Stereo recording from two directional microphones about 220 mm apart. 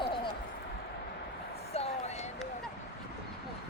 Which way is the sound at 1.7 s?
30° left (ahead or behind).